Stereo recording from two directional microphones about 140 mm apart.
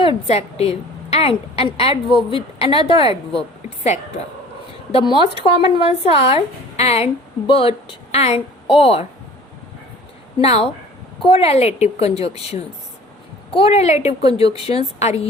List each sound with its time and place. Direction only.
0.3 s a woman's voice: 50° left (ahead or behind)
3.8 s a woman's voice: 55° left (ahead or behind)
4.9 s a woman's voice: 45° left (ahead or behind)
10.4 s a woman's voice: 45° left (ahead or behind)